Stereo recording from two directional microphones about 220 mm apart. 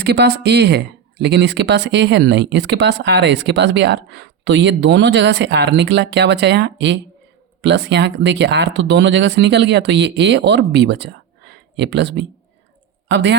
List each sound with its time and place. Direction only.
0.0 s speech: 50° right (ahead or behind)